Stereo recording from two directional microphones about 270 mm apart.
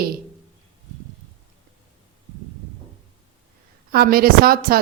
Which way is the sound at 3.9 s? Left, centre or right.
Right.